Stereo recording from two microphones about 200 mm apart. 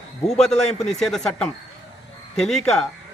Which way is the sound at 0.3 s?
Centre (ahead or behind).